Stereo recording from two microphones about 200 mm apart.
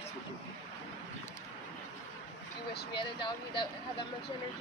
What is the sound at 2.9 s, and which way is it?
Speech, 25° left (ahead or behind).